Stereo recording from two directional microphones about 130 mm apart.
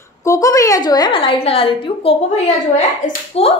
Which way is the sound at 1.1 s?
45° left (ahead or behind).